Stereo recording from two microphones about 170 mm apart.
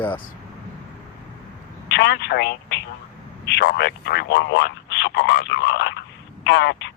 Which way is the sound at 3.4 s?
70° left (ahead or behind).